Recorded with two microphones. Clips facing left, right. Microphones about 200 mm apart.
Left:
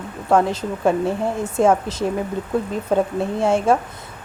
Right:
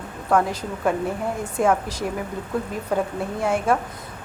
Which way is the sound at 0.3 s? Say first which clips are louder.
Left 3 dB; 25° left (ahead or behind).